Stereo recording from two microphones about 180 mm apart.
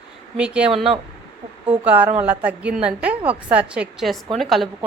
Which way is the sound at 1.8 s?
10° right (ahead or behind).